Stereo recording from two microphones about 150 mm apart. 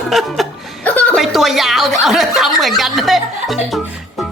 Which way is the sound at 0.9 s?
10° left (ahead or behind).